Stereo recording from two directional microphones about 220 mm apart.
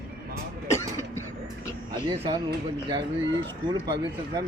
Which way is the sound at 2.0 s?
20° right (ahead or behind).